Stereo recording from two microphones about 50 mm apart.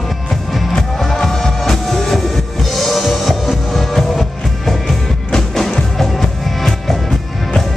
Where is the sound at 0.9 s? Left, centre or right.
Centre.